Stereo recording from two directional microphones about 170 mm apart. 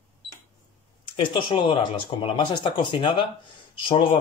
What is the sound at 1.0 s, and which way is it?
Speech, 30° left (ahead or behind).